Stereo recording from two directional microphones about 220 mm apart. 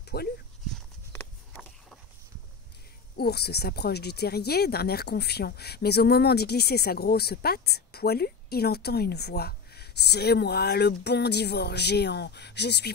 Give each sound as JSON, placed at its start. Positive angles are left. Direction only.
{"t": 0.1, "sound": "speech", "side_deg": 45}
{"t": 0.7, "sound": "a sound", "side_deg": 5}
{"t": 3.2, "sound": "speech", "side_deg": 45}